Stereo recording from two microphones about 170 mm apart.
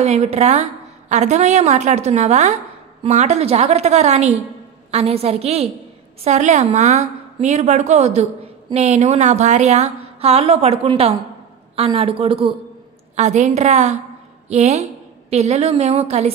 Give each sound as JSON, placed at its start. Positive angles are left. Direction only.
{"t": 0.0, "sound": "a woman's voice", "side_deg": -40}
{"t": 13.1, "sound": "a woman's voice", "side_deg": -45}